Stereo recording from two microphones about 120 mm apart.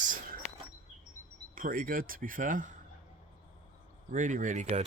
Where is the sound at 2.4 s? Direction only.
90° right.